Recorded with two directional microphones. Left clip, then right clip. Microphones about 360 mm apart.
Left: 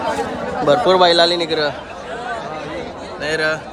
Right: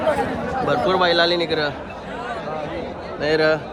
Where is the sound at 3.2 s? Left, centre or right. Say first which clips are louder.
Right 1 dB; centre.